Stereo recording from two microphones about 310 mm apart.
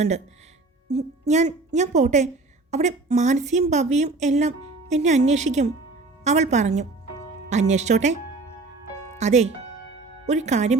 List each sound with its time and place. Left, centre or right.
0.9 s a woman's voice: right
9.1 s a woman's voice: right